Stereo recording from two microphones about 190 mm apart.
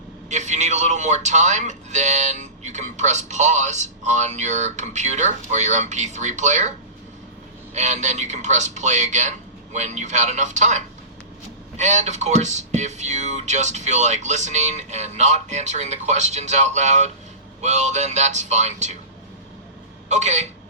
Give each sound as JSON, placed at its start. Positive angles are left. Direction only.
{"t": 0.3, "sound": "speech", "side_deg": -35}
{"t": 20.1, "sound": "speech", "side_deg": -35}